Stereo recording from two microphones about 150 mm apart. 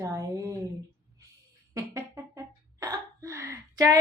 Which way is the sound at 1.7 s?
20° right (ahead or behind).